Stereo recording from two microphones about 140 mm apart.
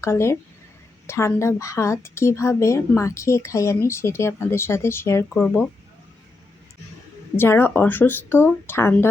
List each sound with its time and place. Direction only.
0.0 s speech: 20° left (ahead or behind)
7.3 s speech: 15° left (ahead or behind)